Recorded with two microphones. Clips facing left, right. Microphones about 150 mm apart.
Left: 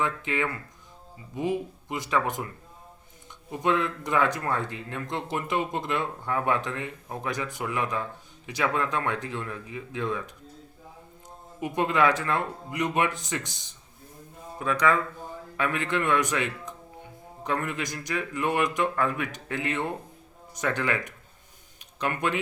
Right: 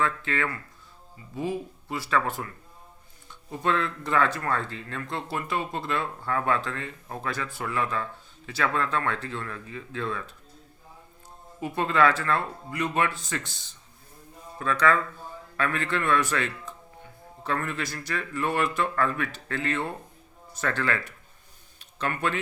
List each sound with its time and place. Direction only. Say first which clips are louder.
0.0 s speech: even; 15° left (ahead or behind)
11.6 s a man's voice: even; 15° left (ahead or behind)
21.8 s a sound: left 1 dB; 15° left (ahead or behind)